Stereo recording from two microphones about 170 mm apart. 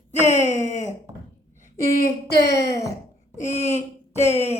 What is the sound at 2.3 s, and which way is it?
Speech, 75° left (ahead or behind).